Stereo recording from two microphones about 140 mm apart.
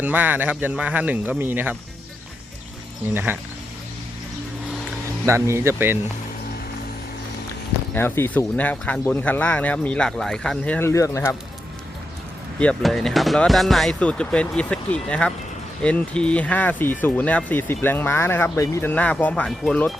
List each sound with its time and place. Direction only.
0.0 s speech: 10° right (ahead or behind)
5.2 s speech: 20° right (ahead or behind)
7.9 s speech: 15° left (ahead or behind)
10.8 s speech: 20° left (ahead or behind)
12.5 s speech: 5° left (ahead or behind)